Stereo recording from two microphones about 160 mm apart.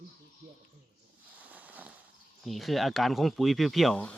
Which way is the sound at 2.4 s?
Centre (ahead or behind).